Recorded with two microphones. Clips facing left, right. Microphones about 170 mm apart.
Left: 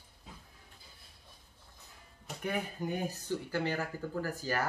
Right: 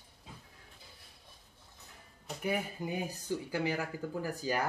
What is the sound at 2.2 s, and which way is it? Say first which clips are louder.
Speech: right 1 dB; 5° right (ahead or behind).